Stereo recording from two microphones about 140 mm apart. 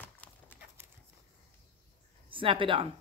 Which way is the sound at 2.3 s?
40° right (ahead or behind).